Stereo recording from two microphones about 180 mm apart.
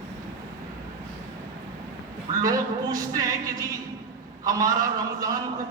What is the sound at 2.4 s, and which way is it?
A man's voice, 20° right (ahead or behind).